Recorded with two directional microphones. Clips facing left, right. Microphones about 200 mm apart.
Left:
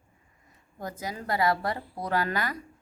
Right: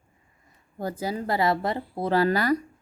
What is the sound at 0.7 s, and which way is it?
A woman's voice, 30° right (ahead or behind).